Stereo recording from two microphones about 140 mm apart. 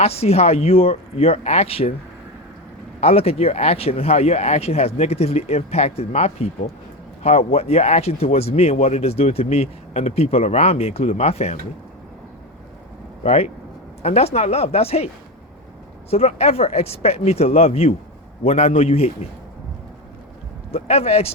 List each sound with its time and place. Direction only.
0.0 s speech: 50° left (ahead or behind)
3.0 s speech: 45° left (ahead or behind)
13.2 s speech: 50° left (ahead or behind)
20.7 s speech: 50° left (ahead or behind)